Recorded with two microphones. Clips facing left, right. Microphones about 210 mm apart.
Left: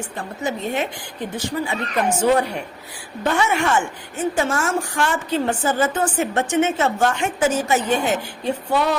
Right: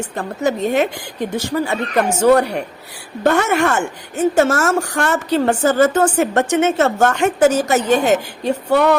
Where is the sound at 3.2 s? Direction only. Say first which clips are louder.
Right 5 dB; 60° right (ahead or behind).